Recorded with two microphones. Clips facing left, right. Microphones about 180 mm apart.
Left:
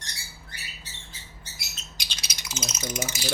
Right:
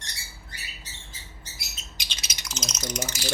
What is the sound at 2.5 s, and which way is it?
Speech, 5° left (ahead or behind).